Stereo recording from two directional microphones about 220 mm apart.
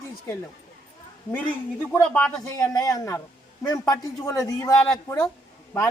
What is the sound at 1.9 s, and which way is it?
Speech, 5° left (ahead or behind).